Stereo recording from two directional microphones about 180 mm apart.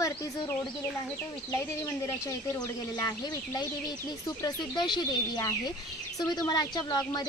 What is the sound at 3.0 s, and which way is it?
Speech, 20° left (ahead or behind).